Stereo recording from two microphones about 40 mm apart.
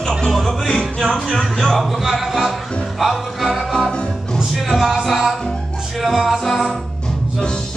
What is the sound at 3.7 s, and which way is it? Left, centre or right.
Music, left.